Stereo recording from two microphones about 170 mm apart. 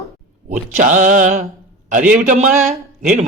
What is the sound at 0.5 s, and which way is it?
Speech, 50° right (ahead or behind).